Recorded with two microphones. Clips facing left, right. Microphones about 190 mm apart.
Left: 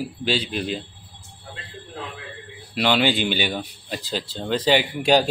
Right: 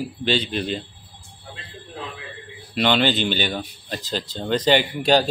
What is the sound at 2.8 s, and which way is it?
Speech, 5° left (ahead or behind).